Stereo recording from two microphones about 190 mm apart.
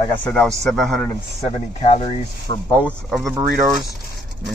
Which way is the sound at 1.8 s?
30° left (ahead or behind).